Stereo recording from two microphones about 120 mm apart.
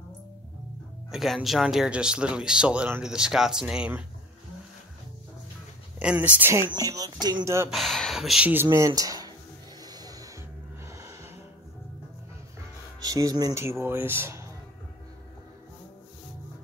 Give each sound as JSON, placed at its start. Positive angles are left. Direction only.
{"t": 1.1, "sound": "speech", "side_deg": 0}
{"t": 5.9, "sound": "speech", "side_deg": -10}
{"t": 6.7, "sound": "speech", "side_deg": -30}
{"t": 7.4, "sound": "speech", "side_deg": -25}
{"t": 7.7, "sound": "speech", "side_deg": 0}
{"t": 8.6, "sound": "speech", "side_deg": -30}
{"t": 9.8, "sound": "a sound", "side_deg": -35}
{"t": 10.9, "sound": "music", "side_deg": -25}
{"t": 13.0, "sound": "speech", "side_deg": -30}